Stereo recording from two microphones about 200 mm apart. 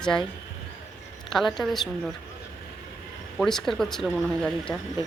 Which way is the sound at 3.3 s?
Centre (ahead or behind).